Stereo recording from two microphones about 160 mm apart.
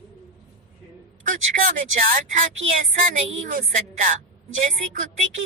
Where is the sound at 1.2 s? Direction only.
60° right (ahead or behind).